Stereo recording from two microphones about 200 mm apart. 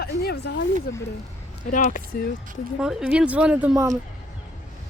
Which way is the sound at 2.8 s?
5° right (ahead or behind).